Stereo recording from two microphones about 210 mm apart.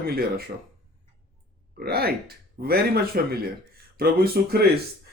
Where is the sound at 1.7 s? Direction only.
45° right (ahead or behind).